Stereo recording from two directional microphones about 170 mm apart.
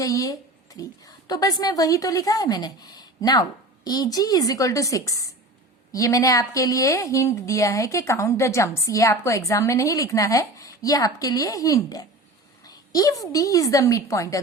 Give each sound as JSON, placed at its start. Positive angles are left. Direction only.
{"t": 0.0, "sound": "a woman's voice", "side_deg": 20}